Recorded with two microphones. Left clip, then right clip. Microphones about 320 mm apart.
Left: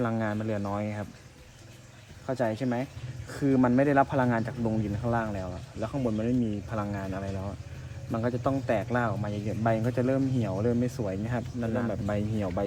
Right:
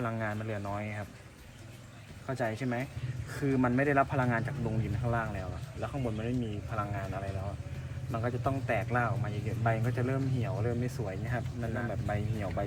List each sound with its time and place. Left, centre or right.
0.0 s speech: left
2.2 s a man's voice: left